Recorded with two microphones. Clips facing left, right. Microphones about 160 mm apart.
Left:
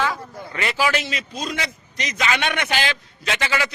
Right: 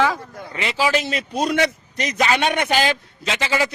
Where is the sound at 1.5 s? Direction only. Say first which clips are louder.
Right 9 dB; 45° right (ahead or behind).